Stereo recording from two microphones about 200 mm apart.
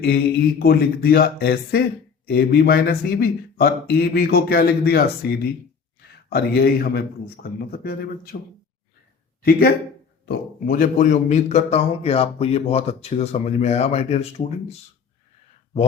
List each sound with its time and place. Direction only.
0.6 s speech: 50° left (ahead or behind)
9.4 s a man's voice: 50° left (ahead or behind); by 14.8 s 30° left (ahead or behind)